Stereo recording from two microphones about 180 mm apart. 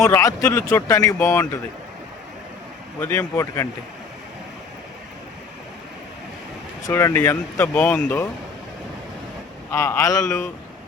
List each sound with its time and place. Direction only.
0.0 s speech: 15° left (ahead or behind)
3.0 s speech: 10° left (ahead or behind)
6.8 s speech: 15° left (ahead or behind)
9.7 s speech: 15° left (ahead or behind)